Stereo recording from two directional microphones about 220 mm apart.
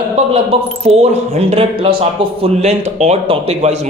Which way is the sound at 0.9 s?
30° right (ahead or behind).